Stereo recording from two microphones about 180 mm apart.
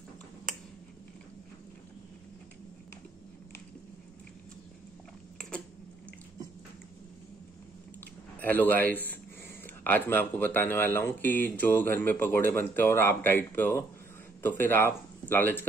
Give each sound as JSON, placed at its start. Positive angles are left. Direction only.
{"t": 8.4, "sound": "speech", "side_deg": 10}